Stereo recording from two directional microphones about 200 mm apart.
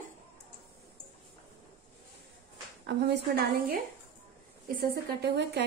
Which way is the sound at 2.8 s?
60° right (ahead or behind).